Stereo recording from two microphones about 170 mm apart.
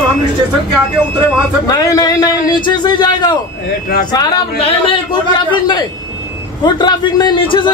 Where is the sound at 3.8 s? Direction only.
60° left (ahead or behind).